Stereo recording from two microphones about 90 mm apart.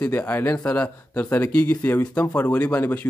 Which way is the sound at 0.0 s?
20° left (ahead or behind).